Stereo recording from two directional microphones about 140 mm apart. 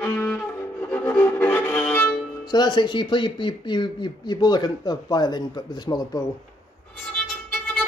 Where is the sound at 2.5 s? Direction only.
30° left (ahead or behind).